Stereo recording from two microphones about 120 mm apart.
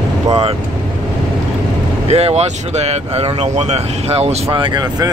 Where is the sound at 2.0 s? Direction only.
60° right (ahead or behind).